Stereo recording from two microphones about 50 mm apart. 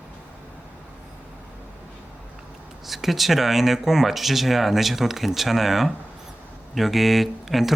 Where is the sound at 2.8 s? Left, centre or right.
Centre.